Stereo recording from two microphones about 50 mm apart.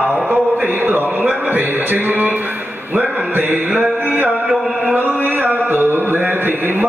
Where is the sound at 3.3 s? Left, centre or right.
Right.